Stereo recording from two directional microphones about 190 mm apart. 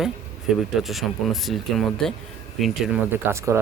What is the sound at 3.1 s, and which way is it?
Speech, 15° right (ahead or behind).